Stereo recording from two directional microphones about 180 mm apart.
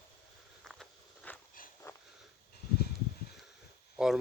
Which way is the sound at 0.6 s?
Centre (ahead or behind).